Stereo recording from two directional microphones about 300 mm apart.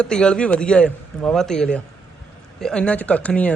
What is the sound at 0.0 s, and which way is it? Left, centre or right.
A man's voice, centre.